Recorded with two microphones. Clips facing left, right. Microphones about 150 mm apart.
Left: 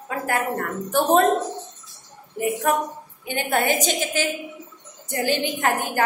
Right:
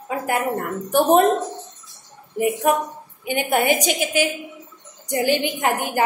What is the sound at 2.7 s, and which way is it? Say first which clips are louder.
A woman's voice: right 2 dB; 15° right (ahead or behind).